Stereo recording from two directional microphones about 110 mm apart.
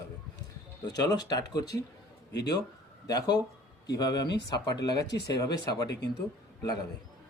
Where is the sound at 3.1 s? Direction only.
35° left (ahead or behind).